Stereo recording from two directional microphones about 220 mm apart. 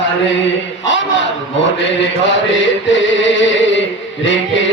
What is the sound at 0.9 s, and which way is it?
Chant, 55° left (ahead or behind).